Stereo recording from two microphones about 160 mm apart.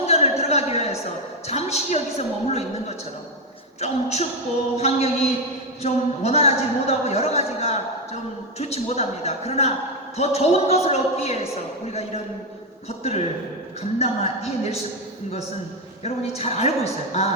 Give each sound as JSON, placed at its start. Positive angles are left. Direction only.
{"t": 0.0, "sound": "a sound", "side_deg": 40}
{"t": 1.5, "sound": "a woman's voice", "side_deg": 40}
{"t": 3.8, "sound": "speech", "side_deg": 45}
{"t": 13.0, "sound": "speech", "side_deg": 40}
{"t": 16.0, "sound": "speech", "side_deg": 40}